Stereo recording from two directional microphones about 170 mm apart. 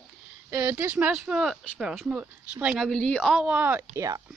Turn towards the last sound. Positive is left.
turn(degrees=-20)  # may be behind; listen again after turning